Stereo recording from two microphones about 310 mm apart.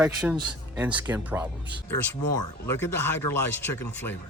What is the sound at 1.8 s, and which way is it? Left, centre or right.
Speech, centre.